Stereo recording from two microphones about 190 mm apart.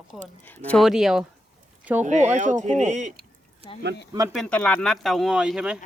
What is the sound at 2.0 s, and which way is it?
Speech, 40° right (ahead or behind).